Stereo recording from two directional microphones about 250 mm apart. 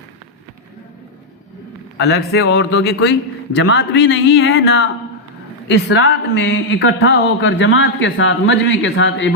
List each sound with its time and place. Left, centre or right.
2.0 s a man's voice: left